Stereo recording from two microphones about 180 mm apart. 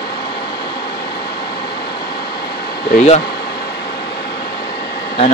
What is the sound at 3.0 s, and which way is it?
Speech, 40° left (ahead or behind).